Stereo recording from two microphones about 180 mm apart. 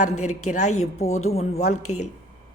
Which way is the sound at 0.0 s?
40° left (ahead or behind).